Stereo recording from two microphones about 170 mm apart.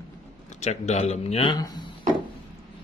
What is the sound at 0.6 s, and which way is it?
A man's voice, 40° left (ahead or behind).